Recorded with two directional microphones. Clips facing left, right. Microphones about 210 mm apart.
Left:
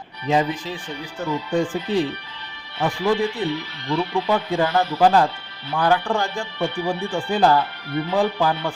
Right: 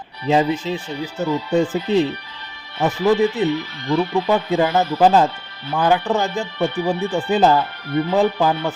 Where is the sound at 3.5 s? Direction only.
45° right (ahead or behind).